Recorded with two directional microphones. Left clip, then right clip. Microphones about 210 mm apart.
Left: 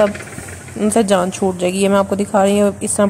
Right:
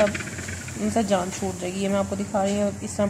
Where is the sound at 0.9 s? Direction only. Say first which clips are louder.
Left 9 dB; 40° left (ahead or behind).